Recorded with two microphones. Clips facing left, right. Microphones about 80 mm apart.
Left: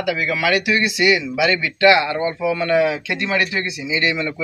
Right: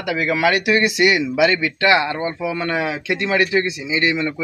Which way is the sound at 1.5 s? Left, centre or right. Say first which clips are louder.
Left 2 dB; right.